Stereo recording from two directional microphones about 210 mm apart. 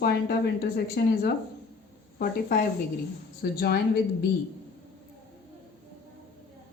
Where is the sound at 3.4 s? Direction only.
50° left (ahead or behind).